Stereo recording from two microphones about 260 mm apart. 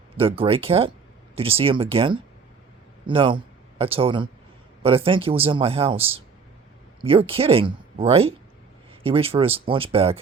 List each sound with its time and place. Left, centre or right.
0.2 s a man's voice: right